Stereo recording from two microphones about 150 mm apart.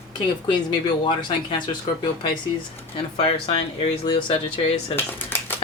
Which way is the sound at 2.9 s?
40° left (ahead or behind).